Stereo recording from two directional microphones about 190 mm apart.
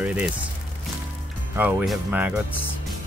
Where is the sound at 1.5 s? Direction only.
10° right (ahead or behind).